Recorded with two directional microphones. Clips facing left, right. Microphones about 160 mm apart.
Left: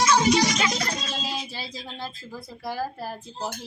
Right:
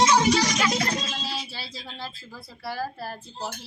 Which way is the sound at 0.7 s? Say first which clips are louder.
Right 3 dB; 25° right (ahead or behind).